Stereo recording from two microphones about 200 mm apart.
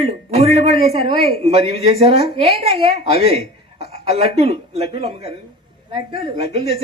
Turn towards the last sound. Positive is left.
turn(degrees=-30)  # may be behind; listen again after turning